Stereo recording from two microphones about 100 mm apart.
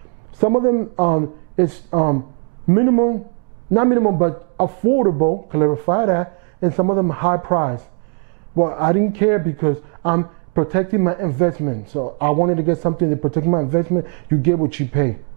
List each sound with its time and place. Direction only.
0.4 s a man's voice: 20° right (ahead or behind)